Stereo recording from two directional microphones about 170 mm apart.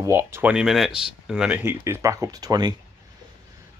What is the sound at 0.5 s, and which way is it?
Speech, centre (ahead or behind).